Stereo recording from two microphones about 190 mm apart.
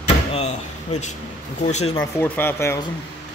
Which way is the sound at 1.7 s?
35° left (ahead or behind).